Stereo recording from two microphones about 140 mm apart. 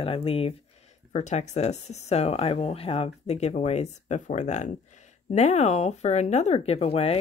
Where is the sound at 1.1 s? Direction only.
55° left (ahead or behind).